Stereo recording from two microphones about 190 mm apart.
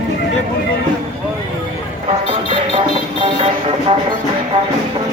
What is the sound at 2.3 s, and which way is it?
Music, 25° right (ahead or behind).